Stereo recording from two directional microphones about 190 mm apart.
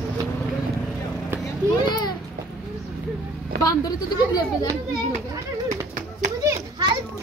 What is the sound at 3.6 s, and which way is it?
Speech, 20° left (ahead or behind).